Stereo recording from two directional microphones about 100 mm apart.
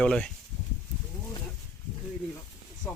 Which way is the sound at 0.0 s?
10° left (ahead or behind).